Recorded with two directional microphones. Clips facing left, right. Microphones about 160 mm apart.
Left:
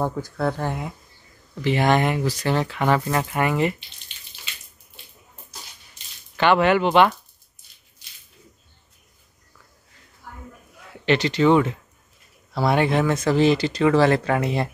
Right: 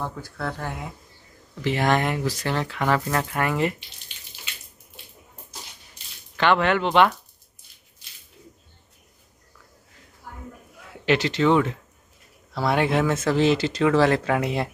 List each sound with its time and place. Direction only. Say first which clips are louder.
0.2 s speech: left 6 dB; 25° left (ahead or behind)
1.6 s speech: left 3 dB; centre (ahead or behind)
6.3 s speech: left 3 dB; 5° left (ahead or behind)
10.9 s speech: left 1 dB; 5° right (ahead or behind)